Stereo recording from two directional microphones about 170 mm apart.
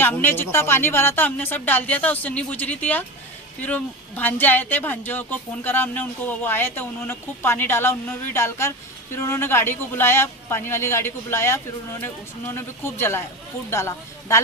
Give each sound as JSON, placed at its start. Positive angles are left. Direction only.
{"t": 0.0, "sound": "speech", "side_deg": 10}